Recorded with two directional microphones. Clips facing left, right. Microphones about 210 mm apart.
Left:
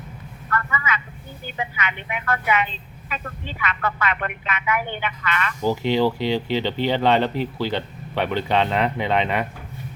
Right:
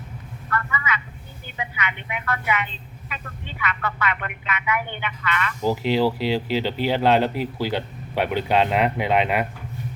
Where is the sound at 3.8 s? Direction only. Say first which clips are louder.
Left 3 dB; 45° left (ahead or behind).